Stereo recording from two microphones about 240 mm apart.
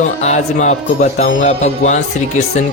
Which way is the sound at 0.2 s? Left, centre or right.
Left.